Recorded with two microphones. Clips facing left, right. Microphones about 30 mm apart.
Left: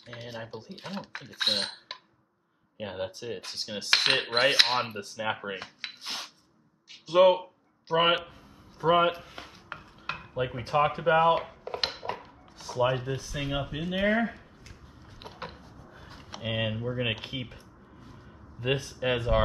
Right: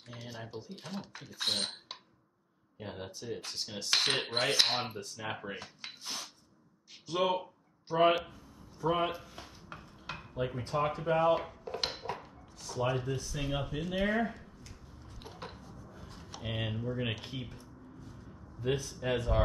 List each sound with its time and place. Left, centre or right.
0.0 s speech: left
0.6 s cutlery: left
2.8 s cutlery: left
4.9 s speech: left
5.3 s a sound: left
7.2 s speech: left
8.3 s a sound: left
11.4 s dishes: left
12.0 s speech: left
14.1 s a sound: left
17.3 s speech: left
18.6 s speech: left